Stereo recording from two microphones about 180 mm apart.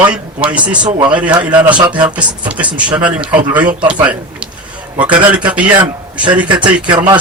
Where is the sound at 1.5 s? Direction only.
25° right (ahead or behind).